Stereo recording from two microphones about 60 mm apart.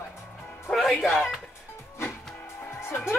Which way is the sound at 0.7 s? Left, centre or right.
Centre.